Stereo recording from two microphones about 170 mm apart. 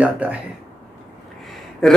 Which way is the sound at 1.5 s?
5° left (ahead or behind).